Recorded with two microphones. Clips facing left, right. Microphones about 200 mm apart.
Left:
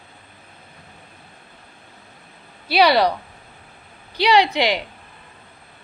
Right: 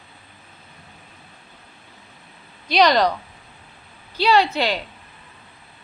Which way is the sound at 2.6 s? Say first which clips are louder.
Left 1 dB; 10° left (ahead or behind).